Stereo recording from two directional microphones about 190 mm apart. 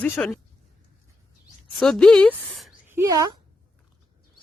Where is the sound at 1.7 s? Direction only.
Centre (ahead or behind).